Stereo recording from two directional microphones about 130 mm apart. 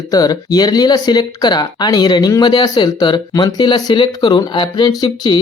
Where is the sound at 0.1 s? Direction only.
30° left (ahead or behind).